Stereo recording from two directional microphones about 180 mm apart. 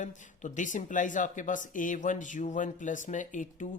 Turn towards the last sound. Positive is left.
turn(degrees=45)  # may be behind; listen again after turning